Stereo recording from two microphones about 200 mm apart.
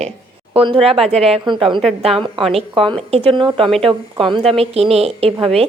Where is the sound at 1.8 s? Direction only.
Centre (ahead or behind).